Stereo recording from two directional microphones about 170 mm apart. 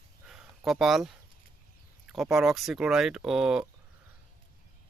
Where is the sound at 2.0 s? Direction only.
Centre (ahead or behind).